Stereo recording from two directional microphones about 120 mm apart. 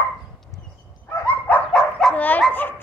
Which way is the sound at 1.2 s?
10° left (ahead or behind).